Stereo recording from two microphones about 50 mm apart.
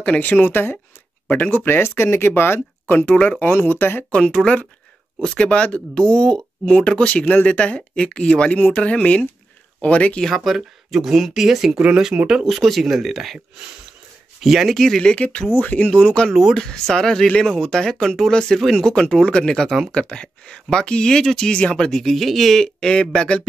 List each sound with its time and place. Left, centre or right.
0.0 s speech: left
1.8 s speech: left
2.9 s speech: left
4.1 s speech: centre
10.2 s speech: centre
12.1 s speech: right
12.4 s speech: centre
14.4 s speech: centre
14.7 s speech: centre
15.1 s speech: left; by 18.3 s centre
18.3 s speech: centre
19.9 s speech: left
22.0 s speech: centre
22.8 s speech: centre